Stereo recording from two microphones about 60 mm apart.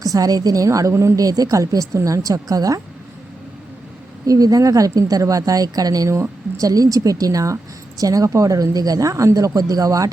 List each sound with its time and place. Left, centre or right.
0.0 s a woman's voice: right
1.2 s a woman's voice: right
4.3 s a woman's voice: right